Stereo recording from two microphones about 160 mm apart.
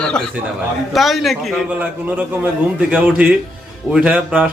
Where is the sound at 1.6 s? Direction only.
10° right (ahead or behind).